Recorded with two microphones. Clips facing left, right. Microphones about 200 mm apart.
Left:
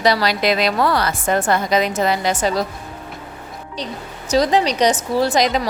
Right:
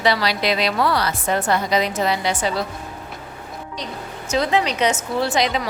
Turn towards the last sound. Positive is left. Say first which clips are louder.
# left 4 dB
turn(degrees=40)  # may be behind; listen again after turning